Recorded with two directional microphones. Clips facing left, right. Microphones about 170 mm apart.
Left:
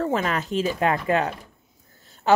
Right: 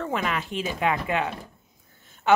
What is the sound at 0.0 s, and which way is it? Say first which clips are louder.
Speech: left 4 dB; 40° left (ahead or behind).